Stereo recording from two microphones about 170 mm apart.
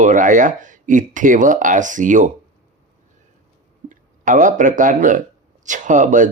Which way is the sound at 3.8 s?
50° right (ahead or behind).